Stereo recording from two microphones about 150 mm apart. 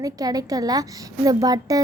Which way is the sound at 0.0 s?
25° right (ahead or behind).